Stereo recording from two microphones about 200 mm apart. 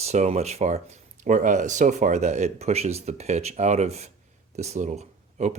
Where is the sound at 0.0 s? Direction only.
35° right (ahead or behind).